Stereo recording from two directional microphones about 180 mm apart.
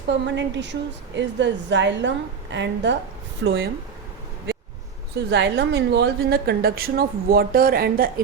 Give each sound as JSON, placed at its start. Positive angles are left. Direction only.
{"t": 0.1, "sound": "a woman's voice", "side_deg": -80}
{"t": 5.3, "sound": "a woman's voice", "side_deg": -75}